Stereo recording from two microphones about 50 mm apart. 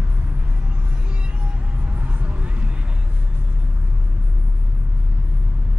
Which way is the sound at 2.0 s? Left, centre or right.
Right.